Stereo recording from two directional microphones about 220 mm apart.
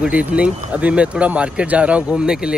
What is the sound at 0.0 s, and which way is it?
Speech, 5° right (ahead or behind).